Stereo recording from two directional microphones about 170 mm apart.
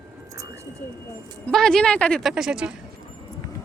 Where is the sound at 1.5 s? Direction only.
5° left (ahead or behind).